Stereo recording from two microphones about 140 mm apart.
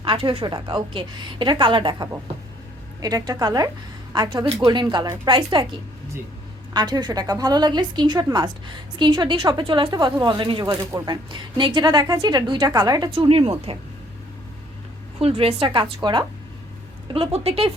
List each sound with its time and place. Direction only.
0.0 s a woman's voice: 40° right (ahead or behind)
6.7 s a woman's voice: 30° right (ahead or behind)
10.7 s a woman's voice: 25° right (ahead or behind); by 13.7 s 40° right (ahead or behind)
15.2 s a woman's voice: 45° right (ahead or behind)